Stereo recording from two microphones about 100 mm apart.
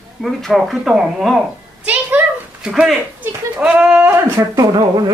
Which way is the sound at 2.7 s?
Centre (ahead or behind).